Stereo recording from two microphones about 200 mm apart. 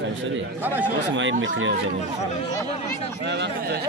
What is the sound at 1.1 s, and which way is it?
Speech, 70° right (ahead or behind).